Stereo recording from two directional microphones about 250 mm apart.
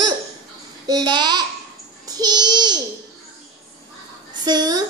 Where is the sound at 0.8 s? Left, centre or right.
Centre.